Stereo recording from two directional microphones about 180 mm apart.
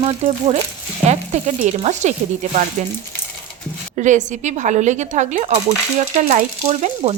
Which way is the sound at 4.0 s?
45° right (ahead or behind).